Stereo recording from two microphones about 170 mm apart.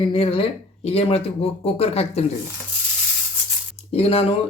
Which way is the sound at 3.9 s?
35° left (ahead or behind).